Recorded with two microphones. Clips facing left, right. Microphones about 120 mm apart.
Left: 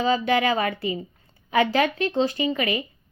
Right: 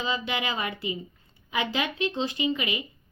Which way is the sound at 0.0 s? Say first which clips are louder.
Left 9 dB; 45° left (ahead or behind).